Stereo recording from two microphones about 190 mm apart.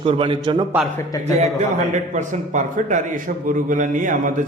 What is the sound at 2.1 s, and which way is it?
A man's voice, 40° right (ahead or behind).